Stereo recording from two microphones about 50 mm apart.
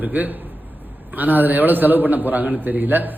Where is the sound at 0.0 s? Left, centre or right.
Right.